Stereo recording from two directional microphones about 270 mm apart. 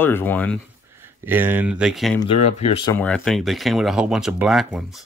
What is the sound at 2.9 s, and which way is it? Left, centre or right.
Speech, centre.